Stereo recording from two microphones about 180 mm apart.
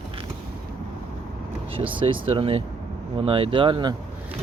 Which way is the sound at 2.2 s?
30° right (ahead or behind).